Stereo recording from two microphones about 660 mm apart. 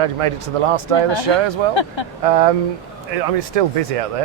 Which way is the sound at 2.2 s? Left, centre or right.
Right.